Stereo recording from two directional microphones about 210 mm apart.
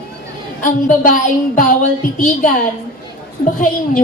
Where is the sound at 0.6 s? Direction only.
40° left (ahead or behind).